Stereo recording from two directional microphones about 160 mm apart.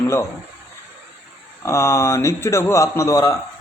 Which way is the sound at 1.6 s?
15° left (ahead or behind).